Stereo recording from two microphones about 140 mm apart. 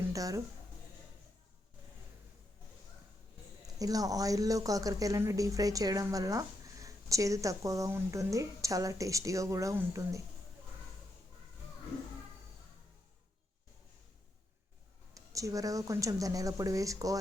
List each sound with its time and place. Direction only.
0.1 s speech: 25° right (ahead or behind)
3.8 s speech: 25° right (ahead or behind)
15.1 s speech: 25° right (ahead or behind)